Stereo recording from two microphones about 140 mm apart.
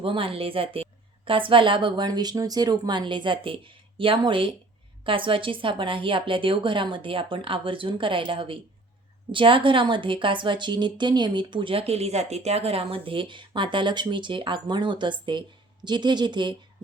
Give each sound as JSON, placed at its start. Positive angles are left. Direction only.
{"t": 0.0, "sound": "a woman's voice", "side_deg": -40}